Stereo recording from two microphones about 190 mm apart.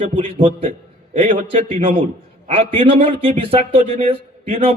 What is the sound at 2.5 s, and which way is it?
A man's voice, 30° right (ahead or behind).